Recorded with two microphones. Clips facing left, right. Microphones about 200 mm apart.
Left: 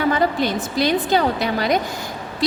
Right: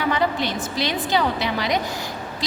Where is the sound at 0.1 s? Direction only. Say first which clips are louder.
Left 3 dB; 45° left (ahead or behind).